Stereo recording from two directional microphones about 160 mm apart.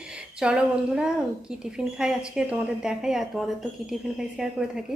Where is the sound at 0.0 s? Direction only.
5° right (ahead or behind).